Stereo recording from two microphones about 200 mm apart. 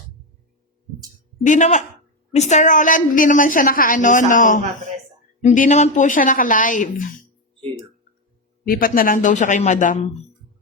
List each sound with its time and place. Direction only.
1.5 s a woman's voice: 35° left (ahead or behind)
8.6 s a woman's voice: 45° left (ahead or behind)